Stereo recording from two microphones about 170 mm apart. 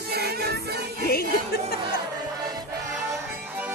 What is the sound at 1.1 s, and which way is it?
Music, 65° left (ahead or behind).